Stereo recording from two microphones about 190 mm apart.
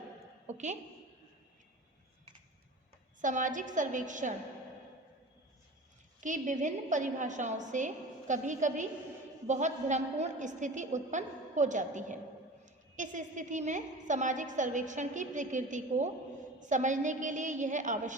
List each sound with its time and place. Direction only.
0.4 s a sound: 40° right (ahead or behind)
3.2 s a woman's voice: 40° right (ahead or behind)
6.1 s a woman's voice: 40° right (ahead or behind)